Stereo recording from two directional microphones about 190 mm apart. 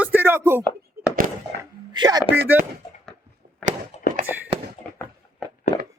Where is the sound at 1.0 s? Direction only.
55° right (ahead or behind).